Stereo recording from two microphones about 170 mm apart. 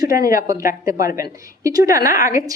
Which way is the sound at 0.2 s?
20° right (ahead or behind).